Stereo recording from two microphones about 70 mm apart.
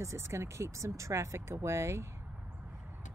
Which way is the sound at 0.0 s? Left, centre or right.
Right.